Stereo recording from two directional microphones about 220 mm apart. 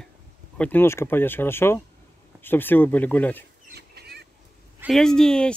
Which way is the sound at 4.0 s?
45° right (ahead or behind).